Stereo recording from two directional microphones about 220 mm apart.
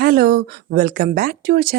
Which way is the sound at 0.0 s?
45° right (ahead or behind).